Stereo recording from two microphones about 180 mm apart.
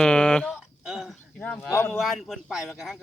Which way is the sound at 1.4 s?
10° left (ahead or behind).